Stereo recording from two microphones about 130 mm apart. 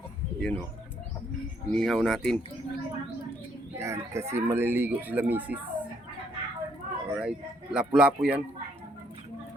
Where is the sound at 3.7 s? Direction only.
20° right (ahead or behind).